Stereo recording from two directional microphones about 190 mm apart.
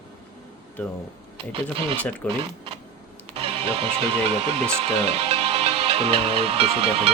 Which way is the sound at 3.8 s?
35° right (ahead or behind).